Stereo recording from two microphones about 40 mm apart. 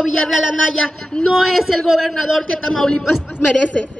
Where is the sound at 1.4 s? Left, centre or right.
Centre.